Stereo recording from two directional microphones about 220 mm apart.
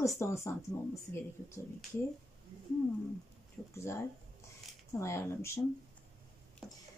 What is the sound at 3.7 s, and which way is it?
Speech, 10° left (ahead or behind).